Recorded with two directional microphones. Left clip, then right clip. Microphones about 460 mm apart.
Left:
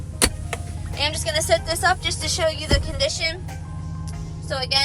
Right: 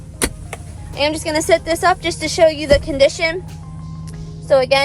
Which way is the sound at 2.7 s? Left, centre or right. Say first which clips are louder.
Right 10 dB; centre.